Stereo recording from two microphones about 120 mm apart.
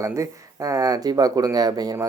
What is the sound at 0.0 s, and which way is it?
Speech, 25° right (ahead or behind).